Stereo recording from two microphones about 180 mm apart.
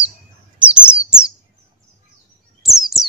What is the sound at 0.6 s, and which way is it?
Chirp, 5° right (ahead or behind).